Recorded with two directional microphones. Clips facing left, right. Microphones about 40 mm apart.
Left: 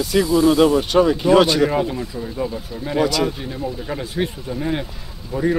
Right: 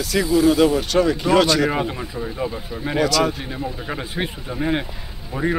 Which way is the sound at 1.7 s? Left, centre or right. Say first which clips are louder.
Left 2 dB; centre.